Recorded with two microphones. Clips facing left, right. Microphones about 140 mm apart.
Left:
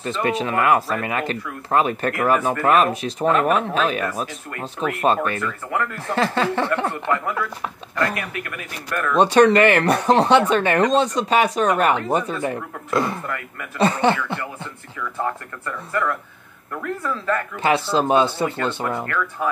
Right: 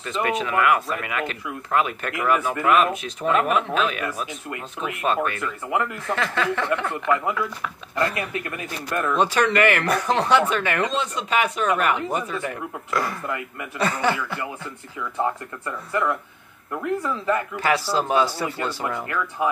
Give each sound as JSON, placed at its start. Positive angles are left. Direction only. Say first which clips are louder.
{"t": 0.0, "sound": "speech", "louder": "left 2 dB", "side_deg": 30}
{"t": 5.4, "sound": "speech", "louder": "even", "side_deg": -15}
{"t": 6.1, "sound": "speech", "louder": "left 5 dB", "side_deg": 30}
{"t": 7.9, "sound": "speech", "louder": "even", "side_deg": -25}
{"t": 9.1, "sound": "speech", "louder": "left 7 dB", "side_deg": 30}
{"t": 15.0, "sound": "speech", "louder": "right 1 dB", "side_deg": -15}
{"t": 17.6, "sound": "speech", "louder": "left 3 dB", "side_deg": 25}
{"t": 19.0, "sound": "speech", "louder": "even", "side_deg": -15}